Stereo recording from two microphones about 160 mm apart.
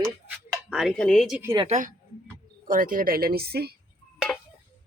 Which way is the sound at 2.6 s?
60° right (ahead or behind).